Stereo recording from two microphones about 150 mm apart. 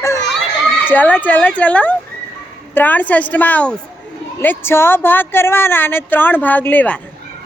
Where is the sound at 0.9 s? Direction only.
10° left (ahead or behind).